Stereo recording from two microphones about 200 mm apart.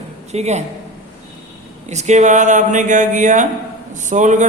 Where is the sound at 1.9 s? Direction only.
35° right (ahead or behind).